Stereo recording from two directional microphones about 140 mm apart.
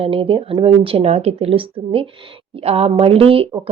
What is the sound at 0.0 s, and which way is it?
A woman's voice, 40° right (ahead or behind).